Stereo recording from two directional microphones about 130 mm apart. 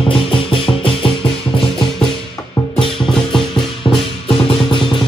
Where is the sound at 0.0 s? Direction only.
40° left (ahead or behind).